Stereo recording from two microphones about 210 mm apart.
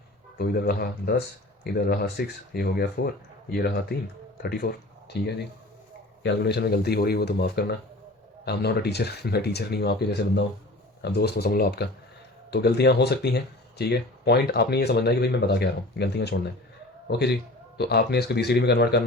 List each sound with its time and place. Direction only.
0.3 s speech: 45° left (ahead or behind)